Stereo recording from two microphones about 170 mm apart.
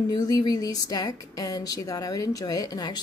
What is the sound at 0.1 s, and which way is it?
A woman's voice, 25° left (ahead or behind).